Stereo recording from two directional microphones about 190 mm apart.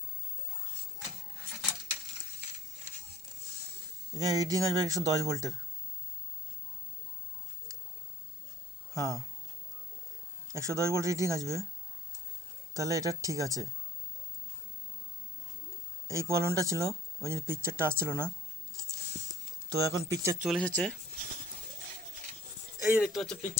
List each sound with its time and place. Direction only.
4.1 s speech: 20° right (ahead or behind)
9.0 s speech: 15° right (ahead or behind)
10.5 s speech: 15° right (ahead or behind)
12.7 s speech: 15° right (ahead or behind)
16.0 s speech: 15° right (ahead or behind)
19.8 s speech: 15° right (ahead or behind)
20.4 s speech: centre (ahead or behind)
22.8 s speech: 5° right (ahead or behind)